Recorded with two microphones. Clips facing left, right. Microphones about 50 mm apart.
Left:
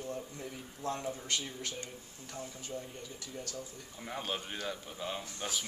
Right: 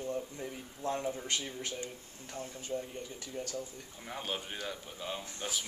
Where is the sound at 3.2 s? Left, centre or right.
Right.